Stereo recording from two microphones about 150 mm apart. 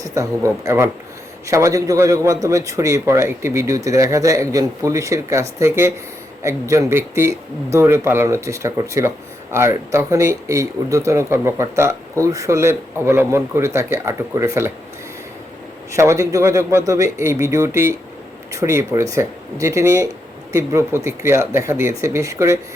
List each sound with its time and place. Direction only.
0.0 s speech: 20° right (ahead or behind)
15.9 s speech: 20° right (ahead or behind)